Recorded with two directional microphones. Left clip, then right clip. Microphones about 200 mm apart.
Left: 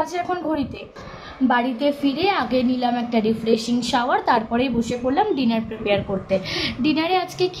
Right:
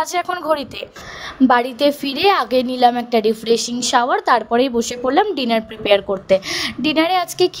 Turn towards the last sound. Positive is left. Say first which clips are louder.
# right 5 dB
turn(degrees=-40)  # may be behind; listen again after turning